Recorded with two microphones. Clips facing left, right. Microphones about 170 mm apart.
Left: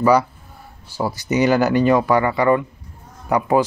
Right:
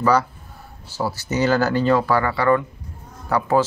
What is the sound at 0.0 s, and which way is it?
Speech, 10° left (ahead or behind).